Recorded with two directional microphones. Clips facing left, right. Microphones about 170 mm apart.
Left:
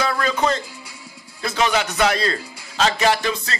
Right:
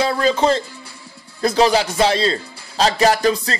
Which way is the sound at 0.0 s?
30° right (ahead or behind).